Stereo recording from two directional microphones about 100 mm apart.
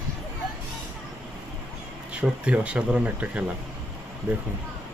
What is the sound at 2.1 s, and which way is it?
Speech, 10° right (ahead or behind).